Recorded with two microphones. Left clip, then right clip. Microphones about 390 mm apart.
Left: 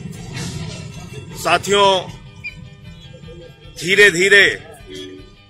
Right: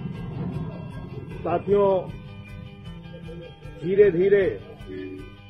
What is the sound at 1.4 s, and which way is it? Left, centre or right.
Speech, left.